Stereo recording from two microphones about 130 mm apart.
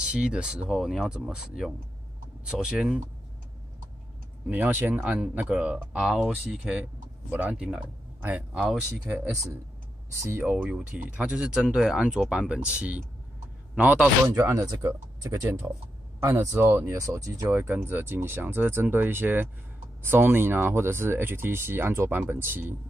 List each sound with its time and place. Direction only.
0.0 s speech: 10° right (ahead or behind)
4.5 s speech: 15° right (ahead or behind)
10.2 s speech: 15° right (ahead or behind)
14.2 s speech: 20° right (ahead or behind)